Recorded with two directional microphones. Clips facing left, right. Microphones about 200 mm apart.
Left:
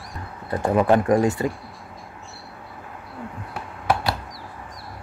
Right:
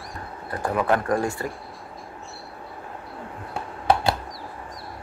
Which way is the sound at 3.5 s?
25° right (ahead or behind).